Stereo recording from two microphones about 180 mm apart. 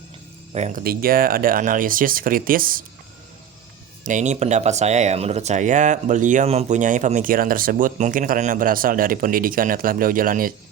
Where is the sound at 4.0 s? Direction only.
45° right (ahead or behind).